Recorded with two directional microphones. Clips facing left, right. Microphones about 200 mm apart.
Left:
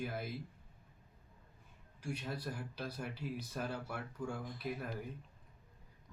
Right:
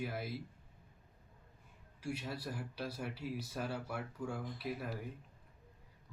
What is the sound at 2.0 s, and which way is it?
Speech, 5° right (ahead or behind).